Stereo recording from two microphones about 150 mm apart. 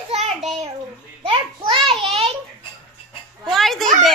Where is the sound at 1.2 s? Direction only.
35° right (ahead or behind).